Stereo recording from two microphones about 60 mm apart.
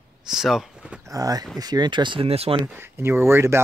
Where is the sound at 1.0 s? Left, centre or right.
Right.